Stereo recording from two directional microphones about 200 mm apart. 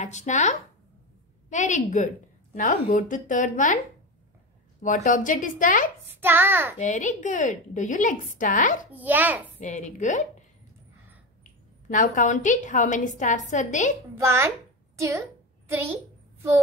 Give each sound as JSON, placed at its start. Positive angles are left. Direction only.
{"t": 0.0, "sound": "a woman's voice", "side_deg": 35}
{"t": 4.8, "sound": "a woman's voice", "side_deg": 40}
{"t": 6.2, "sound": "a child's voice", "side_deg": -10}
{"t": 6.8, "sound": "a woman's voice", "side_deg": 40}
{"t": 8.9, "sound": "a child's voice", "side_deg": -10}
{"t": 9.6, "sound": "a woman's voice", "side_deg": 40}
{"t": 11.9, "sound": "a woman's voice", "side_deg": 40}
{"t": 14.2, "sound": "a child's voice", "side_deg": -15}